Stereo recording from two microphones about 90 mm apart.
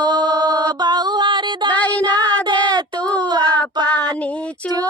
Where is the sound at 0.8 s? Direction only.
50° right (ahead or behind).